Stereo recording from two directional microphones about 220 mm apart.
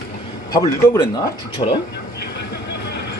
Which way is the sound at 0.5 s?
15° left (ahead or behind).